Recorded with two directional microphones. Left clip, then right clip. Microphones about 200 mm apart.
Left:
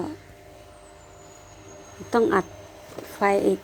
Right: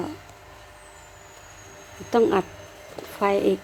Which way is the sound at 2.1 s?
Centre (ahead or behind).